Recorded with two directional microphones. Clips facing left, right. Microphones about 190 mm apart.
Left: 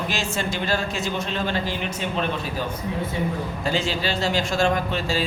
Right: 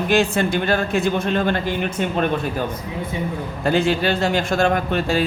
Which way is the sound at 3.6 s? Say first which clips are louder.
Right 8 dB; 55° right (ahead or behind).